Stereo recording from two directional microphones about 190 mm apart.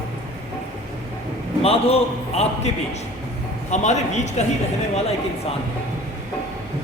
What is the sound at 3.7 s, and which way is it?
Speech, 40° left (ahead or behind).